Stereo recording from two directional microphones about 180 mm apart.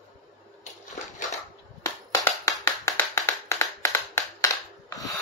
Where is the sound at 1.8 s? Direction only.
15° left (ahead or behind).